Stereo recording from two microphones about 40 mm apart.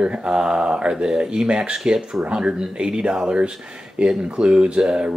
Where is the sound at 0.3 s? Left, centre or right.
Centre.